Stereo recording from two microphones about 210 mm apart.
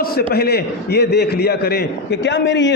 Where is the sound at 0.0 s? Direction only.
50° left (ahead or behind).